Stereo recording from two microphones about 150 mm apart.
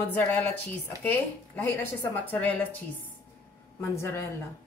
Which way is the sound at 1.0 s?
15° left (ahead or behind).